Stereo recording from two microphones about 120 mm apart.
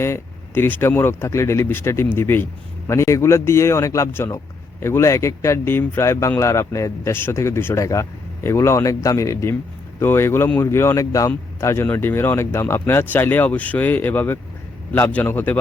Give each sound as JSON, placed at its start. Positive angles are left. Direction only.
{"t": 0.0, "sound": "a man's voice", "side_deg": 20}